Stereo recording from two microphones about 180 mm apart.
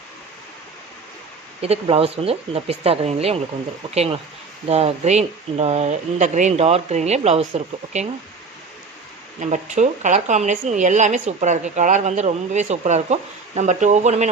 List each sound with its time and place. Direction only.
1.6 s a woman's voice: 35° right (ahead or behind)
9.4 s a woman's voice: 40° right (ahead or behind)